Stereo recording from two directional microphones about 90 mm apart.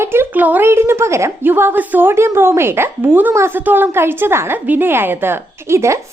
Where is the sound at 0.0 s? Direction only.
25° right (ahead or behind).